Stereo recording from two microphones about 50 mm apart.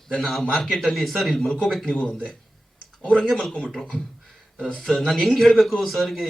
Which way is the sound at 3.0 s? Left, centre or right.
Centre.